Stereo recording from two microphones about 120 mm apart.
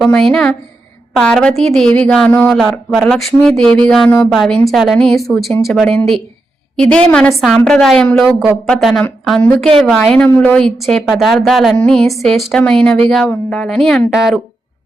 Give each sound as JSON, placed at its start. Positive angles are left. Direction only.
{"t": 0.1, "sound": "speech", "side_deg": 5}
{"t": 6.9, "sound": "a woman's voice", "side_deg": 10}
{"t": 10.8, "sound": "speech", "side_deg": 0}